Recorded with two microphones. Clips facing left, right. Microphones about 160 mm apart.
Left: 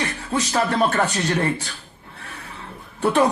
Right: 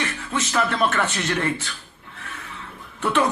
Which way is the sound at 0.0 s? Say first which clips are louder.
Left 2 dB; 35° left (ahead or behind).